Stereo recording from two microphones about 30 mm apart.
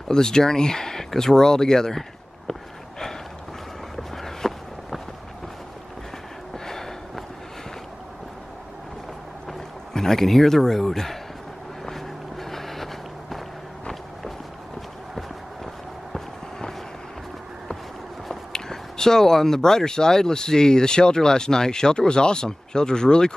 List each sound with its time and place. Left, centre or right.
0.1 s speech: left
3.9 s a sound: centre
6.6 s a sound: centre
9.9 s a man's voice: centre
11.8 s vehicle: centre
15.1 s run: centre
18.3 s speech: centre